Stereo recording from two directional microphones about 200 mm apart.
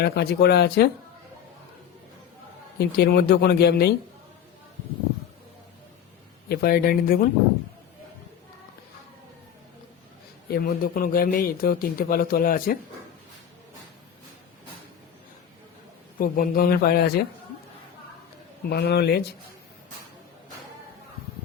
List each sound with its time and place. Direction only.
0.0 s a man's voice: 55° left (ahead or behind)
2.7 s a man's voice: 55° left (ahead or behind)
6.5 s a man's voice: 50° left (ahead or behind)
10.5 s a man's voice: 45° left (ahead or behind)
16.1 s a man's voice: 45° left (ahead or behind)
18.7 s speech: 55° left (ahead or behind)